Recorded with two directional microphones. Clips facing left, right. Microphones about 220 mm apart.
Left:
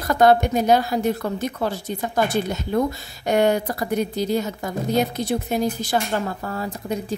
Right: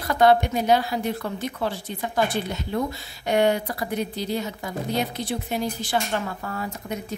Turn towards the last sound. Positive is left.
turn(degrees=35)  # may be behind; listen again after turning